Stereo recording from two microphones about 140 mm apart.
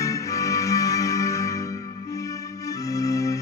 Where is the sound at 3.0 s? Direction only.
25° left (ahead or behind).